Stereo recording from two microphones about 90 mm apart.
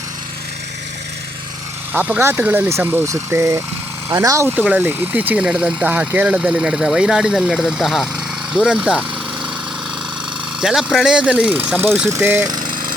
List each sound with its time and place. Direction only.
1.9 s speech: 20° right (ahead or behind); by 4.4 s 35° right (ahead or behind)
4.4 s speech: 15° right (ahead or behind)
10.6 s speech: 5° right (ahead or behind); by 12.5 s 25° right (ahead or behind)
12.5 s jackhammer: 50° right (ahead or behind)